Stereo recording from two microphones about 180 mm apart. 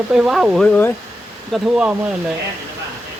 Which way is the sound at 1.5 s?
5° right (ahead or behind).